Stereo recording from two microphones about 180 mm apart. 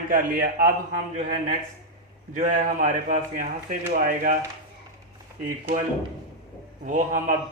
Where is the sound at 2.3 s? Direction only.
50° right (ahead or behind).